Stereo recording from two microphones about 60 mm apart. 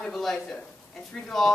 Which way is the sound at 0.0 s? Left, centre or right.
Centre.